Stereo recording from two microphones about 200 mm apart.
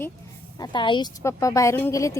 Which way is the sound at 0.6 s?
25° left (ahead or behind).